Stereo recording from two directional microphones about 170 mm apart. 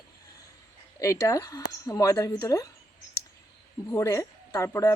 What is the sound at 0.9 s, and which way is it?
Speech, 20° left (ahead or behind).